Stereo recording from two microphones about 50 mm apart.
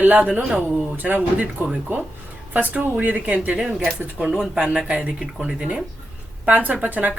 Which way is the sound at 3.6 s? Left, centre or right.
Centre.